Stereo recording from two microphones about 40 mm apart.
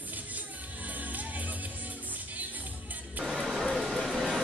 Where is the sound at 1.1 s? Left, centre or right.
Right.